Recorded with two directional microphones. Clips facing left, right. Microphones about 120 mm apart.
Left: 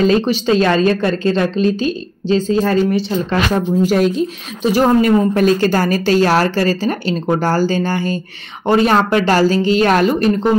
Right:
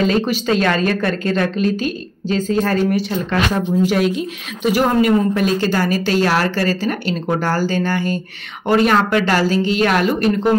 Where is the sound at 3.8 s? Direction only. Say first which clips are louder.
Left 3 dB; 40° left (ahead or behind).